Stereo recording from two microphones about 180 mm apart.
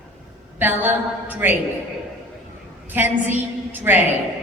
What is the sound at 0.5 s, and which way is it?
A woman's voice, 10° right (ahead or behind).